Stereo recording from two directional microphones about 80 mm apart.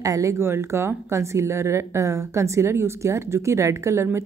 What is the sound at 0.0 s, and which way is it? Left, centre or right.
A woman's voice, right.